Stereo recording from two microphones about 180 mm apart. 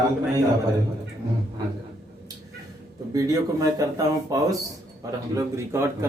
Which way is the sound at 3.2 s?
20° right (ahead or behind).